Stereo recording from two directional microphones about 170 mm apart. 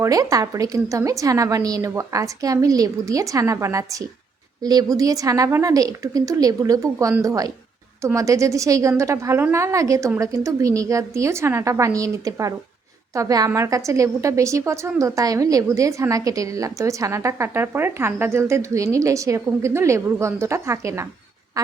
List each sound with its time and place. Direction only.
0.0 s a woman's voice: 20° right (ahead or behind)